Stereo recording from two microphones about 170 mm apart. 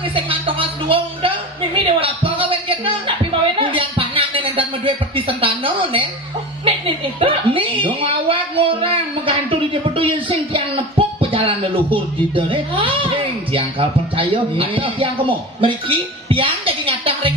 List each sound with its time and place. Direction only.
0.0 s speech: 30° right (ahead or behind)
1.7 s a sound: 30° right (ahead or behind)
6.7 s speech: 30° right (ahead or behind)